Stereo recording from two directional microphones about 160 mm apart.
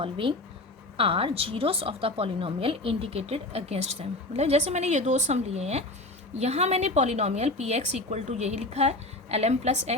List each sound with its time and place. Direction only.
0.0 s a woman's voice: 35° right (ahead or behind)